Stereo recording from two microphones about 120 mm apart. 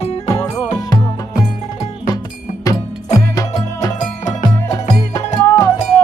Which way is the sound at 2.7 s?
30° left (ahead or behind).